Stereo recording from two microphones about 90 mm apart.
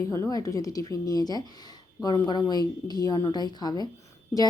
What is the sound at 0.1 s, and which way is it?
Speech, 40° left (ahead or behind).